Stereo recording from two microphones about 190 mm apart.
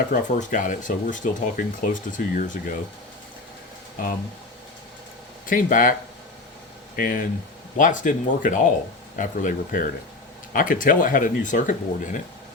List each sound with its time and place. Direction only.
0.1 s speech: 40° left (ahead or behind)
5.5 s speech: 45° left (ahead or behind)
6.9 s speech: 45° left (ahead or behind)